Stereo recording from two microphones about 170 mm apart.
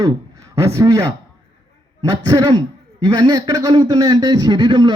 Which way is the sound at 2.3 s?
25° right (ahead or behind).